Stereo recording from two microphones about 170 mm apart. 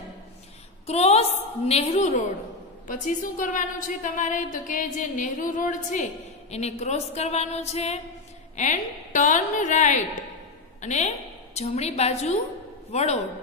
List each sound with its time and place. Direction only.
0.8 s a woman's voice: 40° left (ahead or behind)
2.9 s a woman's voice: 50° left (ahead or behind)
6.5 s a woman's voice: 40° left (ahead or behind)